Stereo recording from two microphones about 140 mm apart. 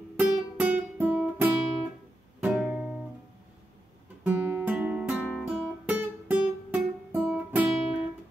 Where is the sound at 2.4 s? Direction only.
5° right (ahead or behind).